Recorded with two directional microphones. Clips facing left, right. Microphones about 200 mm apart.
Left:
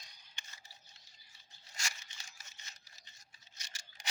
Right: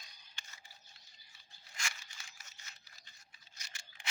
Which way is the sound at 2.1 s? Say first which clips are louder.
Even; 25° left (ahead or behind).